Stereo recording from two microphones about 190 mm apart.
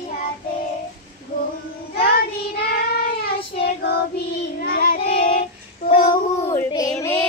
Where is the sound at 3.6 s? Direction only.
55° left (ahead or behind).